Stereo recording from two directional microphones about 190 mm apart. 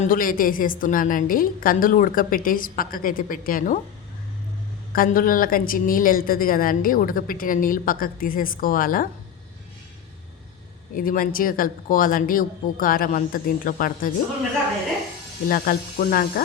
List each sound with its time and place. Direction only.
0.0 s speech: 45° left (ahead or behind)
4.9 s speech: 50° left (ahead or behind)
10.9 s speech: 45° left (ahead or behind)
15.4 s speech: 50° left (ahead or behind)